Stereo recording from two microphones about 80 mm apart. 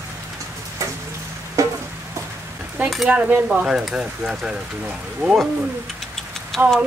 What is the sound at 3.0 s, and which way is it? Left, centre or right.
Speech, centre.